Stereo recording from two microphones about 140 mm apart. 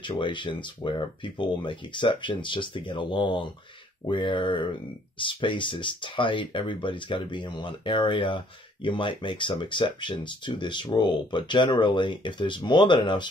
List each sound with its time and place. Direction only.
0.1 s speech: 35° left (ahead or behind)